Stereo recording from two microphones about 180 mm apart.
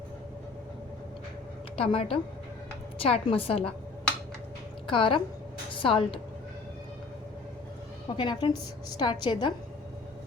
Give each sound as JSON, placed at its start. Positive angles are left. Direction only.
{"t": 1.7, "sound": "a woman's voice", "side_deg": 30}
{"t": 4.9, "sound": "a woman's voice", "side_deg": 30}
{"t": 8.1, "sound": "a woman's voice", "side_deg": 25}